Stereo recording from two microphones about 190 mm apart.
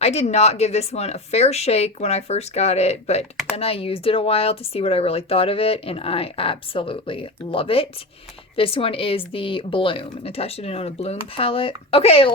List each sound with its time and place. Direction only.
0.0 s a woman's voice: 35° left (ahead or behind)